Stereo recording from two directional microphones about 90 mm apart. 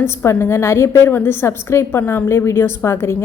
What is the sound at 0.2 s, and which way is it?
A woman's voice, 25° left (ahead or behind).